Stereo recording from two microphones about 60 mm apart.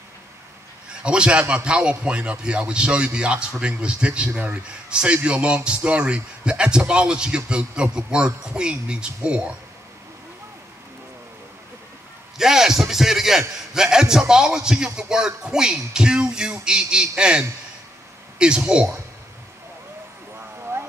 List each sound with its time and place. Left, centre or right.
1.0 s a man's voice: centre
12.4 s a man's voice: centre
20.3 s a sound: right